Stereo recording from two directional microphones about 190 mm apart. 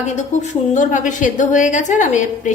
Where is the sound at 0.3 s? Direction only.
40° left (ahead or behind).